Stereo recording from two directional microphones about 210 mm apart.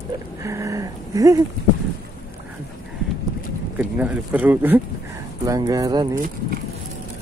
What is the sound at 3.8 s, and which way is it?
Speech, 5° right (ahead or behind).